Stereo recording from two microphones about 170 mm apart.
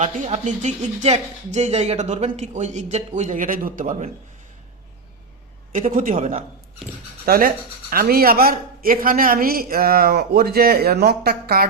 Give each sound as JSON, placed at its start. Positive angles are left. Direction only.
{"t": 0.0, "sound": "speech", "side_deg": -45}
{"t": 5.7, "sound": "speech", "side_deg": -50}
{"t": 7.3, "sound": "speech", "side_deg": -60}